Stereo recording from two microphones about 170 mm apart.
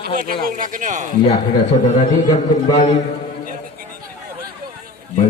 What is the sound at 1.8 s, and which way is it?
Speech, 45° left (ahead or behind).